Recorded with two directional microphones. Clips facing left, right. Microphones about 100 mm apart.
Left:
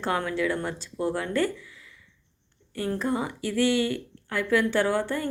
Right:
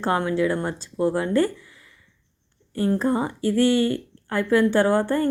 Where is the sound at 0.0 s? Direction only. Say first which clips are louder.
Right 5 dB; 30° right (ahead or behind).